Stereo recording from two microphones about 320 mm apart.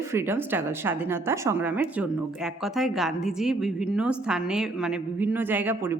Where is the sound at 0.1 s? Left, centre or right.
Centre.